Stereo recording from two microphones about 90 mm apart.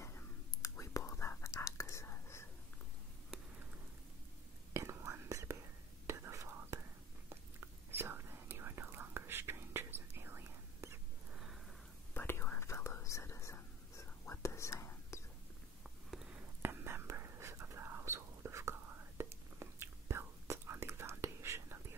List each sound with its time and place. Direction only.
0.0 s whispering: 35° left (ahead or behind)
4.7 s whispering: 30° right (ahead or behind)
12.1 s whispering: 25° left (ahead or behind)
15.8 s a sound: 5° right (ahead or behind)
16.3 s whispering: 25° right (ahead or behind)